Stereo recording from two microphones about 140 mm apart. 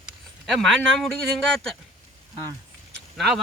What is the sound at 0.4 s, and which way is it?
Speech, centre (ahead or behind).